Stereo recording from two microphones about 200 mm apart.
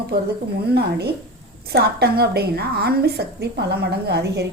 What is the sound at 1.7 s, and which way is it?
A woman's voice, 55° right (ahead or behind).